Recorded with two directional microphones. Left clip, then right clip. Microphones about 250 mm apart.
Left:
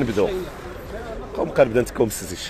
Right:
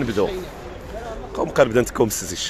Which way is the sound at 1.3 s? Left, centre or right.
Centre.